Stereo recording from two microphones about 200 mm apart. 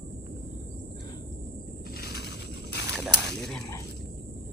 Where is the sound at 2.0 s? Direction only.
55° left (ahead or behind).